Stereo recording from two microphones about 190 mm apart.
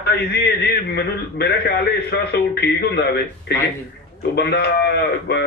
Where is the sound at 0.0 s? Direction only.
60° left (ahead or behind).